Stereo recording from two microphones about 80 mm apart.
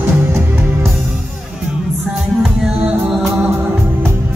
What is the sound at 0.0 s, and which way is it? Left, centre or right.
Music, right.